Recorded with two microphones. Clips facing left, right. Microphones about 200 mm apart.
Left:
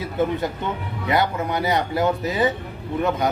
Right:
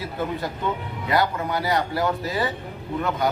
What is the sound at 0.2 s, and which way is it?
A man's voice, 20° left (ahead or behind).